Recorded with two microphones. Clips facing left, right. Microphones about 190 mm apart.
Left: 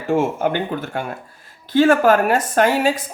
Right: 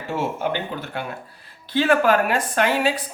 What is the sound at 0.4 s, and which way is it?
Speech, 50° left (ahead or behind).